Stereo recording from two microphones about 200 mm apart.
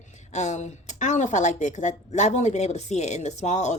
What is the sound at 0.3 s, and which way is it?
Speech, 35° left (ahead or behind).